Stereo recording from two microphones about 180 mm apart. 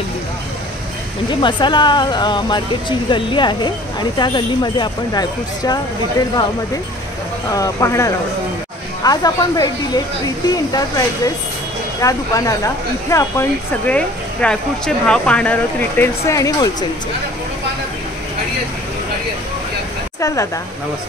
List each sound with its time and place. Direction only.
1.4 s speech: 25° left (ahead or behind)
7.5 s speech: 20° left (ahead or behind)
12.0 s speech: 20° left (ahead or behind)
20.2 s speech: 20° left (ahead or behind)